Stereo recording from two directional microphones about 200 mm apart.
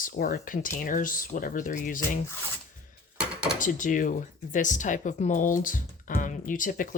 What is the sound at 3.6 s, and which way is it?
Speech, 40° left (ahead or behind).